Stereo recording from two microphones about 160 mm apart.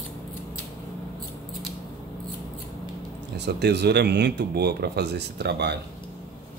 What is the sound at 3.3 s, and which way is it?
Speech, 90° right.